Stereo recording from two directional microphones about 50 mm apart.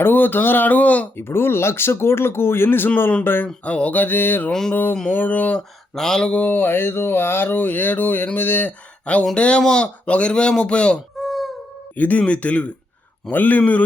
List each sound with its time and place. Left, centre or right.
0.0 s speech: left
1.1 s speech: left
3.4 s speech: left
5.9 s mantra: centre
6.3 s speech: left
9.3 s speech: left
11.2 s wail: centre
11.9 s speech: left